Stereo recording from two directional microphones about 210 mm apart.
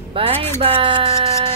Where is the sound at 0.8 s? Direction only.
25° right (ahead or behind).